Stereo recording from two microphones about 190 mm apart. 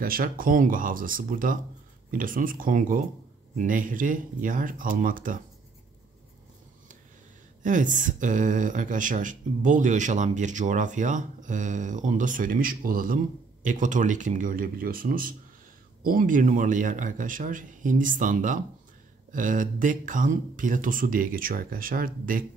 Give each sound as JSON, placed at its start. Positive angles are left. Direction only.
{"t": 0.0, "sound": "speech", "side_deg": -50}
{"t": 7.6, "sound": "speech", "side_deg": -40}